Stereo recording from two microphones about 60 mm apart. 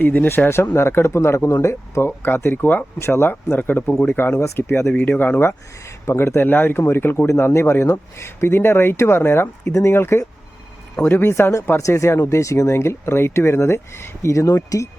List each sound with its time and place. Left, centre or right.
0.0 s speech: left
2.0 s speech: left
3.0 s speech: left
3.6 s speech: left
5.4 s speech: left
11.8 s speech: left
12.4 s speech: left